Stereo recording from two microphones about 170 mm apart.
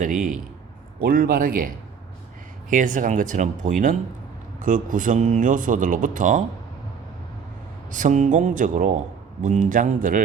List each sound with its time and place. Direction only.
0.0 s speech: 50° right (ahead or behind)
1.0 s a man's voice: 60° right (ahead or behind)
7.9 s speech: 50° right (ahead or behind)